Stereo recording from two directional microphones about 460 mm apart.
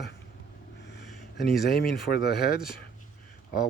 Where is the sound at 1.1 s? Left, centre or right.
Centre.